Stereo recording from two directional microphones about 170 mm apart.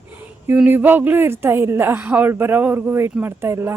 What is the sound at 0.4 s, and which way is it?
A woman's voice, 10° right (ahead or behind).